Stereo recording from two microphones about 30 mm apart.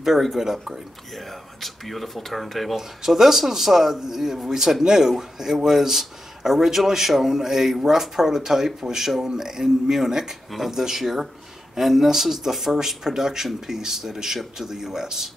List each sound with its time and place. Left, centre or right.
0.0 s speech: centre
1.1 s speech: centre
2.7 s speech: centre